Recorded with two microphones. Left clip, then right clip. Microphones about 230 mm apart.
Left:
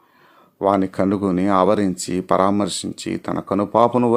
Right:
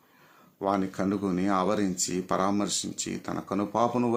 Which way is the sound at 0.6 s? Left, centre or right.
Left.